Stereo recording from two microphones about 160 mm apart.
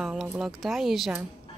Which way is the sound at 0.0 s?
Centre (ahead or behind).